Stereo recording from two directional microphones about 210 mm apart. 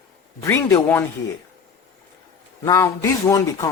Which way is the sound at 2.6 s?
15° left (ahead or behind).